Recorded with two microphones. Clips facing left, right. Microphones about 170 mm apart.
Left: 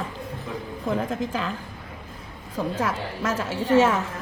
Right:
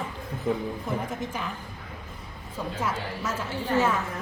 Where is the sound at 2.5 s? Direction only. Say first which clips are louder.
Left 4 dB; 90° left.